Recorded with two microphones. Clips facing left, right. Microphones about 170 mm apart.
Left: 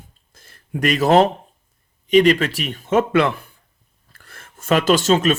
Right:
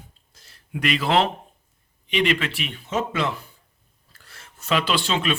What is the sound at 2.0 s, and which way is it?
Speech, 40° left (ahead or behind).